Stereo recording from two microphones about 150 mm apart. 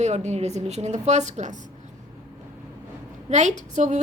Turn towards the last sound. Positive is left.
turn(degrees=-55)  # may be behind; listen again after turning